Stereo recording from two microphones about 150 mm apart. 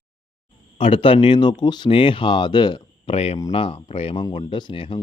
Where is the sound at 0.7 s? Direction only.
35° left (ahead or behind).